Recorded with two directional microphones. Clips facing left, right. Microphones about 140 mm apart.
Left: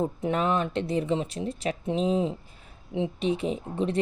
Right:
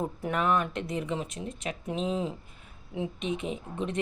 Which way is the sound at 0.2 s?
25° left (ahead or behind).